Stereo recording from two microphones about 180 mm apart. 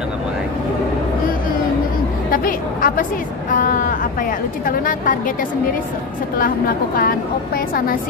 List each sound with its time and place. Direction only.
2.3 s a woman's voice: 50° left (ahead or behind)
7.0 s a woman's voice: 55° left (ahead or behind)